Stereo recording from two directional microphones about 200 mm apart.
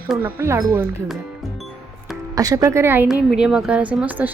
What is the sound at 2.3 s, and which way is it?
Speech, 15° right (ahead or behind).